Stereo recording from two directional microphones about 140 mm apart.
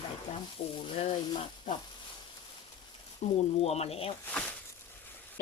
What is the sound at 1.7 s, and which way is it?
Frying, 30° left (ahead or behind).